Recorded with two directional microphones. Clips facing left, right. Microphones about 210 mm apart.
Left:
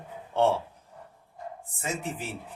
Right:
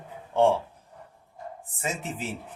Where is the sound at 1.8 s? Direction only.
20° right (ahead or behind).